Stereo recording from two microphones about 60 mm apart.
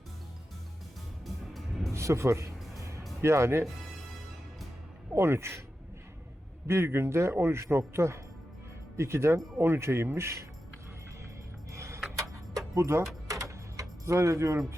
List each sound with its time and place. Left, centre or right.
1.5 s music: centre
1.9 s a man's voice: right
5.1 s a man's voice: right
6.7 s a man's voice: right
11.7 s a sound: right
12.1 s music: right
13.2 s a sound: right